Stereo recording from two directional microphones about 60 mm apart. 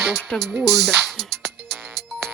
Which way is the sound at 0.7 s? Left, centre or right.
Centre.